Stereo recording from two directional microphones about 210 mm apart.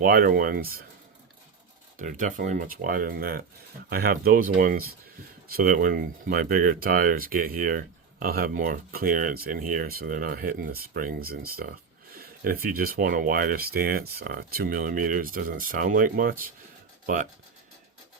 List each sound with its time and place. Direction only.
0.0 s speech: 45° right (ahead or behind)
2.0 s speech: 40° right (ahead or behind)